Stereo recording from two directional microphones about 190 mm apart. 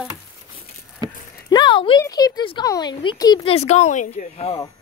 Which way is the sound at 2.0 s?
20° left (ahead or behind).